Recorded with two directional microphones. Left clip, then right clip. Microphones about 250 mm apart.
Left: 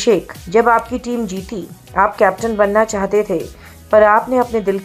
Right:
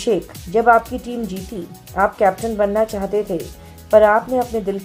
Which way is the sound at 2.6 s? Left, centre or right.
Centre.